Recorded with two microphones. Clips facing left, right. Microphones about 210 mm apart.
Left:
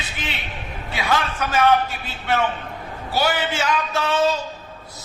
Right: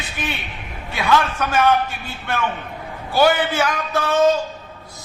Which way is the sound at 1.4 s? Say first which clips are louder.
Right 2 dB; 55° right (ahead or behind).